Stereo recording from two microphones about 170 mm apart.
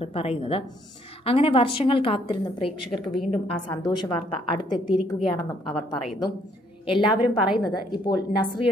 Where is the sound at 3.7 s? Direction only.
25° left (ahead or behind).